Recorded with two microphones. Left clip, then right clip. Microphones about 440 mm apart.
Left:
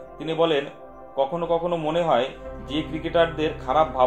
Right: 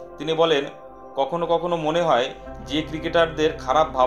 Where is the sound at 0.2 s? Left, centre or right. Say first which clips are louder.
Right 2 dB; centre.